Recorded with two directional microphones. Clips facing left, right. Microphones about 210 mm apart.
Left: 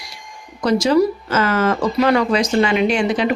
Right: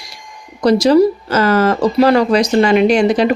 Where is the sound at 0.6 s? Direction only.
35° right (ahead or behind).